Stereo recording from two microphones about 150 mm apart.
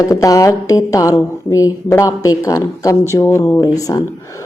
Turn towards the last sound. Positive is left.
turn(degrees=25)  # may be behind; listen again after turning